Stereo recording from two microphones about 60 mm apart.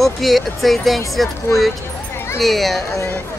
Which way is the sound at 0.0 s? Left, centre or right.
Centre.